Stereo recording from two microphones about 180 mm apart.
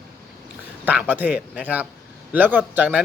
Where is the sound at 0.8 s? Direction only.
10° right (ahead or behind).